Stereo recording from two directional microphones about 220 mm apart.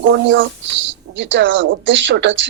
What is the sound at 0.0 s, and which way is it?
Speech, 55° right (ahead or behind).